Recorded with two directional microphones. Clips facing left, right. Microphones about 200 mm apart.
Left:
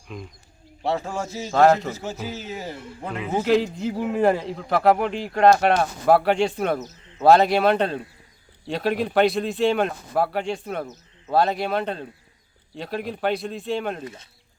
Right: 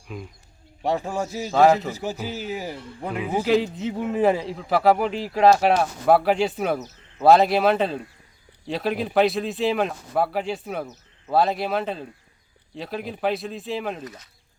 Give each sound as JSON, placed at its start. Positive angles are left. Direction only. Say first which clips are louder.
{"t": 0.1, "sound": "a man's voice", "louder": "right 1 dB", "side_deg": -5}
{"t": 0.9, "sound": "speech", "louder": "right 1 dB", "side_deg": -15}
{"t": 3.4, "sound": "a man's voice", "louder": "left 1 dB", "side_deg": 0}
{"t": 14.0, "sound": "speech", "louder": "left 2 dB", "side_deg": 25}